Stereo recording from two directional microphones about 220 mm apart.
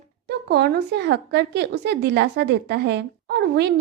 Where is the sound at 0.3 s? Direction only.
50° right (ahead or behind).